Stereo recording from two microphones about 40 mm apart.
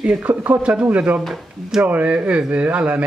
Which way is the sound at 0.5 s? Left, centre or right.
Right.